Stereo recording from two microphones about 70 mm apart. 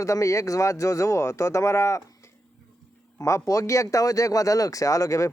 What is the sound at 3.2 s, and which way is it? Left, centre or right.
Speech, left.